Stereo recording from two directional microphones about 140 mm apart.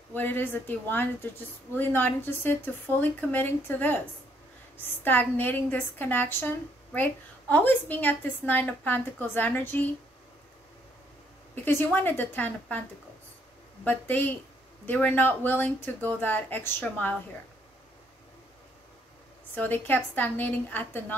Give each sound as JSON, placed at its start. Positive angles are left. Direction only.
{"t": 0.1, "sound": "a woman's voice", "side_deg": 15}
{"t": 5.0, "sound": "a woman's voice", "side_deg": 15}
{"t": 11.6, "sound": "a woman's voice", "side_deg": 15}
{"t": 13.8, "sound": "a woman's voice", "side_deg": 15}
{"t": 19.5, "sound": "a woman's voice", "side_deg": 10}